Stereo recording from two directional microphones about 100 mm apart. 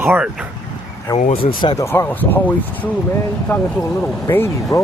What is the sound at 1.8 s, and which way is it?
Speech, 25° left (ahead or behind).